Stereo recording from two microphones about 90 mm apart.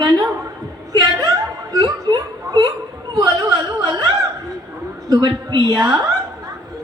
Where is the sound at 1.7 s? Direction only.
45° right (ahead or behind).